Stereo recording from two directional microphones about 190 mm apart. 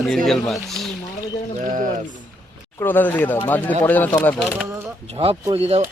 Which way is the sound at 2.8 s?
10° left (ahead or behind).